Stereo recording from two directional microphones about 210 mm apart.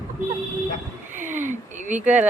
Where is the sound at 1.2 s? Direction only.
35° right (ahead or behind).